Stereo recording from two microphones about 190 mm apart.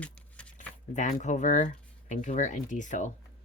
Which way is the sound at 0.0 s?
5° left (ahead or behind).